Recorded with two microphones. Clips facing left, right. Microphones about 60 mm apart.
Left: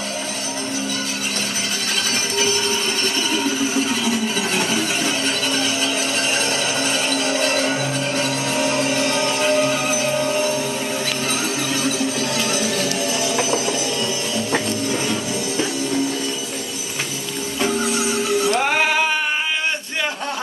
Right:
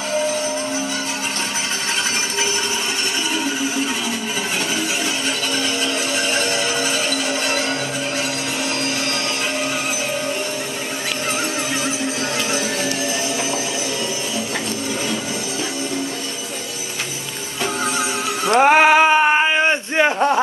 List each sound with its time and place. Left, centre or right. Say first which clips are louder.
6.3 s music: right 1 dB; centre
8.5 s music: left 6 dB; centre
18.5 s a sound: right 7 dB; right